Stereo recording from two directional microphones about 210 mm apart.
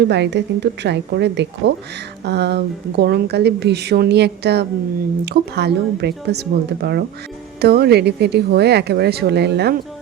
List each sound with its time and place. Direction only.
0.1 s a woman's voice: 55° right (ahead or behind)